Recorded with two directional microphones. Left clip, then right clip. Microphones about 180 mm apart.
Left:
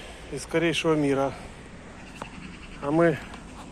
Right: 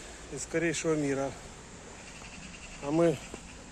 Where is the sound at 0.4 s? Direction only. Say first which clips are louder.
Left 6 dB; centre (ahead or behind).